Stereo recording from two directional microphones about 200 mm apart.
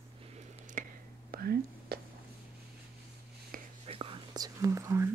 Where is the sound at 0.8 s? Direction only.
40° right (ahead or behind).